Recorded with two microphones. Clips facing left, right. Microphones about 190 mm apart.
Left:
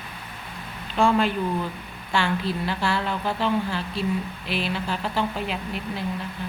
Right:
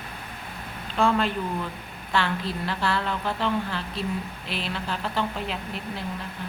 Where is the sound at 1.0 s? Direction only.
Centre (ahead or behind).